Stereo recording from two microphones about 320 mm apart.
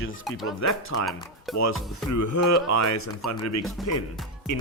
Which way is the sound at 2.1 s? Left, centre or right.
Left.